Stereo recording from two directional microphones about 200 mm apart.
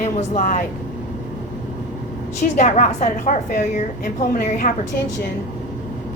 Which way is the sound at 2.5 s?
35° left (ahead or behind).